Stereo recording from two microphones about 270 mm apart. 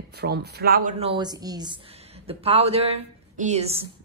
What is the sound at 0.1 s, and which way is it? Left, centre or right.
A woman's voice, right.